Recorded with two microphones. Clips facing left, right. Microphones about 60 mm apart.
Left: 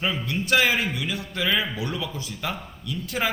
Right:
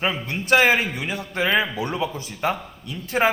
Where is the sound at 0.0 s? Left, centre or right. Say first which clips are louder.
Right 2 dB; right.